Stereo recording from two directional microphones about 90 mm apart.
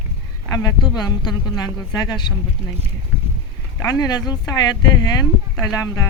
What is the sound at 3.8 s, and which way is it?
Speech, 45° left (ahead or behind).